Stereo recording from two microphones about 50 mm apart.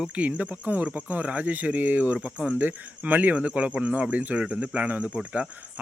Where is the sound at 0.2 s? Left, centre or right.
Right.